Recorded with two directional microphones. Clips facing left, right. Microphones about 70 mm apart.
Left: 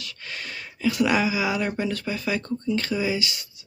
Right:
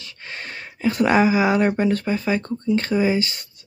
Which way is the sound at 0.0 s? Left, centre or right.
Right.